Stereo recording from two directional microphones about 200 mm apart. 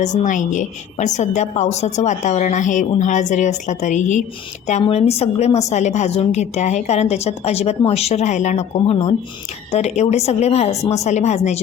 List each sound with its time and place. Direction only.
0.0 s a woman's voice: 35° left (ahead or behind)